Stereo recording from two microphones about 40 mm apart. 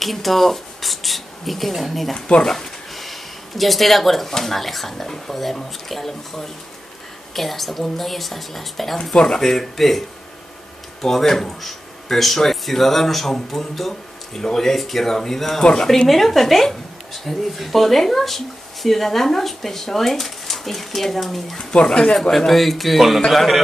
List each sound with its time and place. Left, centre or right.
0.0 s speech: centre
2.1 s speech: centre
2.4 s a sound: centre
4.3 s speech: centre
9.1 s speech: centre
9.4 s speech: centre
16.1 s speech: centre
21.8 s speech: centre